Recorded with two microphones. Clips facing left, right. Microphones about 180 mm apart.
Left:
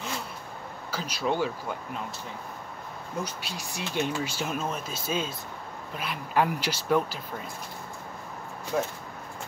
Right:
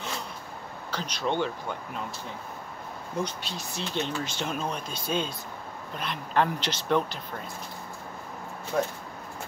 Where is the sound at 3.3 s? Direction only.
10° left (ahead or behind).